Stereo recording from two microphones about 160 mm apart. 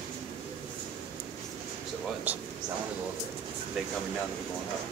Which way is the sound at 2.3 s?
10° right (ahead or behind).